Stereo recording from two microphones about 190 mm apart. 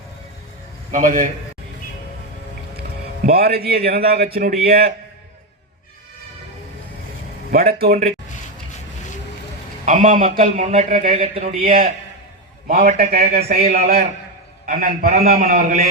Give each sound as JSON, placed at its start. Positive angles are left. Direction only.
{"t": 0.9, "sound": "a man's voice", "side_deg": -40}
{"t": 3.2, "sound": "a man's voice", "side_deg": -55}
{"t": 7.5, "sound": "a man's voice", "side_deg": -55}
{"t": 9.8, "sound": "a man's voice", "side_deg": -40}